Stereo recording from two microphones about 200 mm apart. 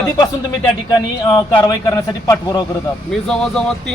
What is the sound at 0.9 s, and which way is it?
A man's voice, 20° left (ahead or behind).